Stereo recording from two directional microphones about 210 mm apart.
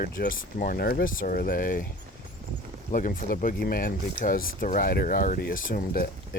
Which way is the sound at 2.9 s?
40° left (ahead or behind).